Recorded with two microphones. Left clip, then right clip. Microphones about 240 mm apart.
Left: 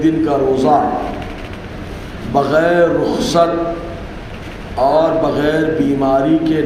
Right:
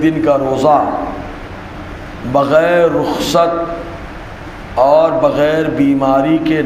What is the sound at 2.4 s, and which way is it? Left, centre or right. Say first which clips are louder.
A man's voice: right 2 dB; right.